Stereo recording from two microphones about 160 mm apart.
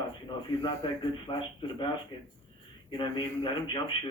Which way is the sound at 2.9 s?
30° left (ahead or behind).